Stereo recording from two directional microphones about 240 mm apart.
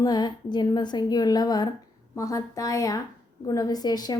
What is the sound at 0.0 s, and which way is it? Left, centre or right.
A woman's voice, centre.